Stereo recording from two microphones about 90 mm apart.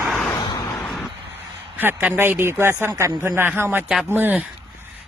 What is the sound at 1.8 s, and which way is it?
Speech, 20° right (ahead or behind).